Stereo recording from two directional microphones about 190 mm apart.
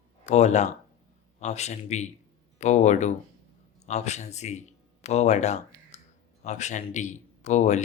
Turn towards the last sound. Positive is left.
turn(degrees=35)  # may be behind; listen again after turning